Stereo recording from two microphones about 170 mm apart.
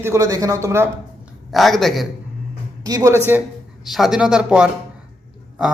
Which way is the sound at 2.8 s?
20° right (ahead or behind).